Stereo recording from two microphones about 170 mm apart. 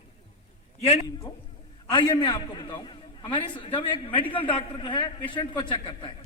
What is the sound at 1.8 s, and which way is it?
A man's voice, 30° left (ahead or behind).